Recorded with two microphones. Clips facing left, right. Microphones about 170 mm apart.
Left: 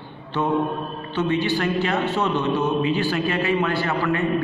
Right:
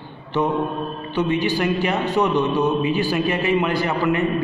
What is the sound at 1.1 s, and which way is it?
A man's voice, 15° right (ahead or behind).